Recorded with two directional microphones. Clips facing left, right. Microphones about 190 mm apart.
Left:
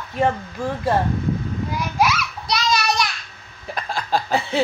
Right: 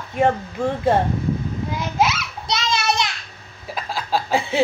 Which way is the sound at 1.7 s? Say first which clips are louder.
Even; 20° right (ahead or behind).